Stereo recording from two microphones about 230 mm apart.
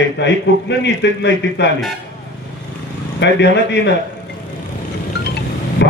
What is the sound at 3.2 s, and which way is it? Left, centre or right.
Speech, left.